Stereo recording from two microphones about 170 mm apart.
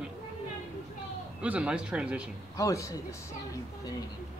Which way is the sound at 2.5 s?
20° left (ahead or behind).